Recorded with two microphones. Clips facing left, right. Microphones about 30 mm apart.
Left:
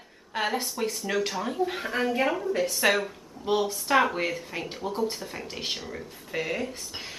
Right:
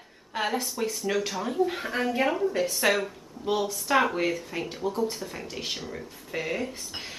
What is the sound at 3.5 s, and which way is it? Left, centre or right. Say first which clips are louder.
Speech: left 1 dB; centre.